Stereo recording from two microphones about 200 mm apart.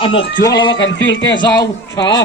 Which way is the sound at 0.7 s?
65° left (ahead or behind).